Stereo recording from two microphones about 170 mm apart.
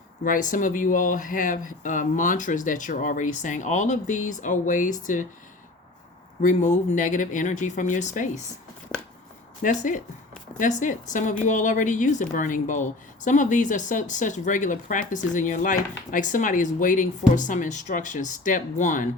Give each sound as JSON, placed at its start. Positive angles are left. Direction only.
{"t": 0.3, "sound": "speech", "side_deg": 50}
{"t": 6.4, "sound": "speech", "side_deg": 45}
{"t": 8.9, "sound": "a sound", "side_deg": 5}
{"t": 9.6, "sound": "speech", "side_deg": 50}